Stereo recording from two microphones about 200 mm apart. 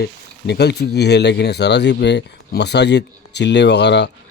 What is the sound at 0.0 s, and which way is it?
Speech, 55° left (ahead or behind).